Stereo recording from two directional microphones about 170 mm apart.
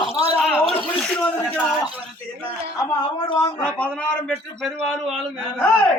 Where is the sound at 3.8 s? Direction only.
5° left (ahead or behind).